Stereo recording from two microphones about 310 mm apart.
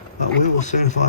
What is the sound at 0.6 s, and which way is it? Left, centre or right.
Speech, left.